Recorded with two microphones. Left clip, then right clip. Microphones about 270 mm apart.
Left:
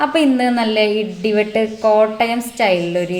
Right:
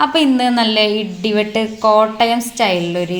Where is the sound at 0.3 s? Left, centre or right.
Right.